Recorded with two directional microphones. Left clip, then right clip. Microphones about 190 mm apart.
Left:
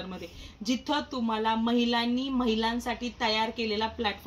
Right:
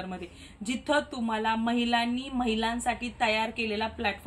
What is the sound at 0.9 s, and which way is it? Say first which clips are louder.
A woman's voice: right 4 dB; 20° right (ahead or behind).